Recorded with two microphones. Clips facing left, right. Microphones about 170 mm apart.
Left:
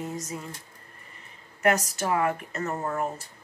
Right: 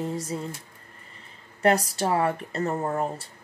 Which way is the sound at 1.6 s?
30° right (ahead or behind).